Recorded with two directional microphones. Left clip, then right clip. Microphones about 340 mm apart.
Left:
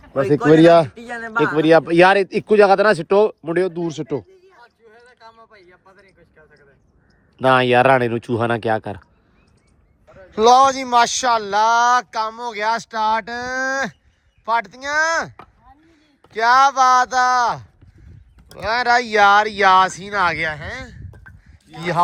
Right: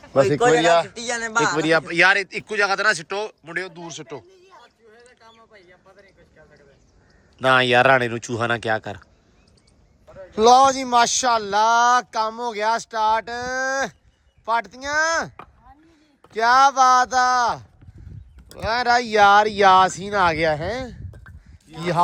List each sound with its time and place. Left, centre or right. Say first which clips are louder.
0.6 s speech: left 6 dB; centre
0.9 s a man's voice: left 1 dB; centre
1.5 s speech: left 10 dB; centre
7.3 s speech: left 2 dB; centre
10.1 s a man's voice: left 1 dB; centre